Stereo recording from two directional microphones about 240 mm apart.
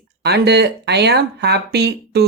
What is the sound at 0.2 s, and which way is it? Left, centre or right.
Speech, right.